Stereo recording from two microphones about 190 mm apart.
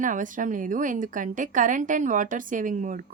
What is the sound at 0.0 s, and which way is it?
A woman's voice, 45° right (ahead or behind).